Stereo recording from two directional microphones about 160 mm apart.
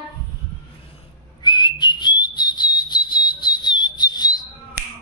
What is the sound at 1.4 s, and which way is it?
Whistle, 30° left (ahead or behind).